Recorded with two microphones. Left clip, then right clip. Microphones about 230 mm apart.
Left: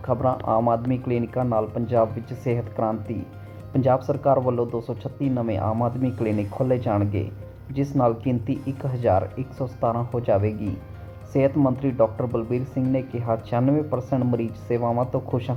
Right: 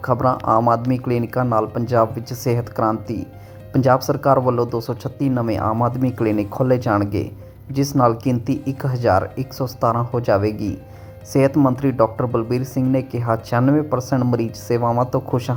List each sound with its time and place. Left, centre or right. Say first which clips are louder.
0.1 s speech: right 5 dB; centre